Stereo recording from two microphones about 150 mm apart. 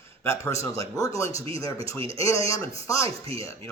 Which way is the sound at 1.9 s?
40° right (ahead or behind).